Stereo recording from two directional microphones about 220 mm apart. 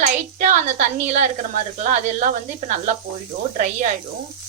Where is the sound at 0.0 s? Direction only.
35° right (ahead or behind).